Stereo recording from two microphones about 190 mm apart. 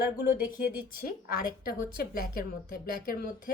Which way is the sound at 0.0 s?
50° left (ahead or behind).